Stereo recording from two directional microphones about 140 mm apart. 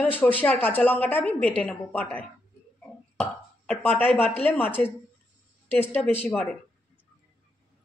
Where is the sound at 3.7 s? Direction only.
10° left (ahead or behind).